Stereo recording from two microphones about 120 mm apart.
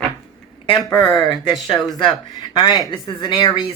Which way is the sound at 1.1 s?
40° left (ahead or behind).